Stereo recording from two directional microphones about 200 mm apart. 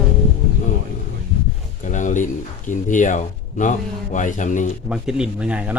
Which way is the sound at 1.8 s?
40° left (ahead or behind).